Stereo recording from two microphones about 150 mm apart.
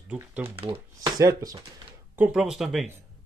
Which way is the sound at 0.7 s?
25° right (ahead or behind).